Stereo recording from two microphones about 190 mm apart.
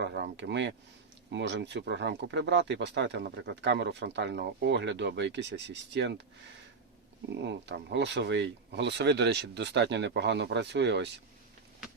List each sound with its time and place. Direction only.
0.0 s speech: 65° right (ahead or behind)
7.3 s speech: 70° right (ahead or behind)